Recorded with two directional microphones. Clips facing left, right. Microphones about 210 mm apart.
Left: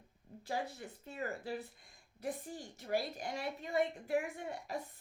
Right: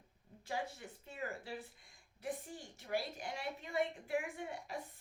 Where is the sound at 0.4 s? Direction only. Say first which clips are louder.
Left 2 dB; 40° left (ahead or behind).